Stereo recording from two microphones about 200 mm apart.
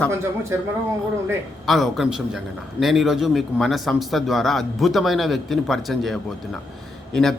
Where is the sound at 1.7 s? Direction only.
Centre (ahead or behind).